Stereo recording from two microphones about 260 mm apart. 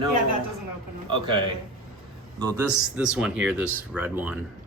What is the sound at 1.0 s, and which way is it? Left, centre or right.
Speech, centre.